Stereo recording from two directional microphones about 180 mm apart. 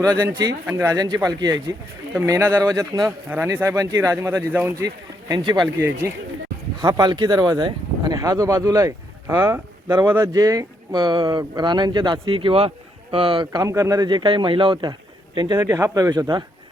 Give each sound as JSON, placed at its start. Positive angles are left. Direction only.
{"t": 0.3, "sound": "speech", "side_deg": -20}
{"t": 5.3, "sound": "speech", "side_deg": -25}
{"t": 6.8, "sound": "speech", "side_deg": -20}